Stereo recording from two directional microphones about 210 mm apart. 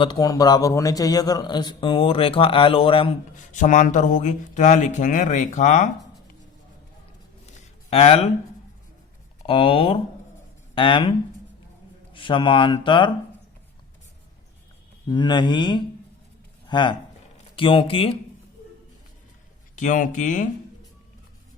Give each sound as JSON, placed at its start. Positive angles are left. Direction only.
{"t": 0.0, "sound": "a man's voice", "side_deg": 20}
{"t": 7.4, "sound": "a sound", "side_deg": 30}
{"t": 9.5, "sound": "a man's voice", "side_deg": 25}
{"t": 12.1, "sound": "a man's voice", "side_deg": 25}
{"t": 15.1, "sound": "a man's voice", "side_deg": 20}
{"t": 19.7, "sound": "speech", "side_deg": 35}